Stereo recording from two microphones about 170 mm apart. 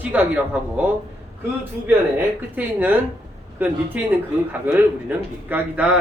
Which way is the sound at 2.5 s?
10° right (ahead or behind).